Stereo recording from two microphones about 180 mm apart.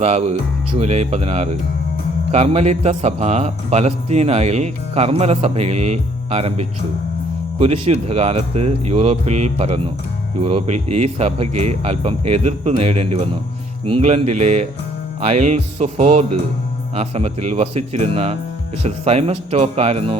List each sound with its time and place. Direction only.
0.0 s a man's voice: 40° right (ahead or behind)